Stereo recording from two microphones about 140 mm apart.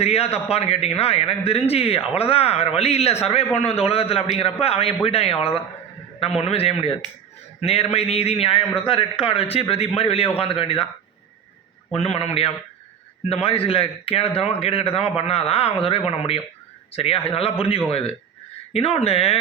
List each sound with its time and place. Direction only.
0.0 s a man's voice: 45° left (ahead or behind)
11.9 s a man's voice: 45° left (ahead or behind)